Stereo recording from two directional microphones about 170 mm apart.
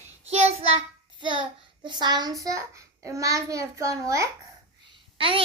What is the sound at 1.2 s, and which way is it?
A child's voice, 30° right (ahead or behind).